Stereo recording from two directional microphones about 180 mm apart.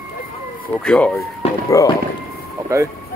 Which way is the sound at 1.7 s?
20° left (ahead or behind).